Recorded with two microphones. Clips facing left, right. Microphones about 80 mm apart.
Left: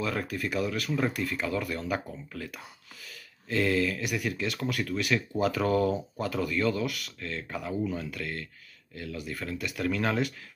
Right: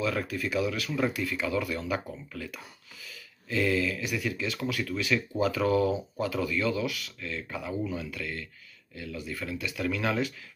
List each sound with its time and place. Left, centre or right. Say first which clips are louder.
0.0 s speech: right 1 dB; left